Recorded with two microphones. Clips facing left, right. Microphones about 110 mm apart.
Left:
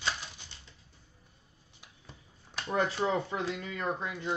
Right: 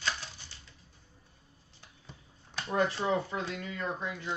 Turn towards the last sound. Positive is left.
turn(degrees=25)  # may be behind; listen again after turning